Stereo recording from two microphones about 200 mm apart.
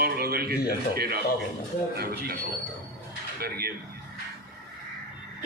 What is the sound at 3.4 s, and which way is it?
Speech, 50° right (ahead or behind).